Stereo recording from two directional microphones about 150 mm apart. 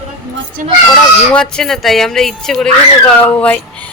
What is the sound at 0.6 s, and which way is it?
Speech, 60° right (ahead or behind).